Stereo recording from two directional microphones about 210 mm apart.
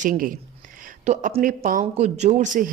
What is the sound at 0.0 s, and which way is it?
Speech, 40° right (ahead or behind).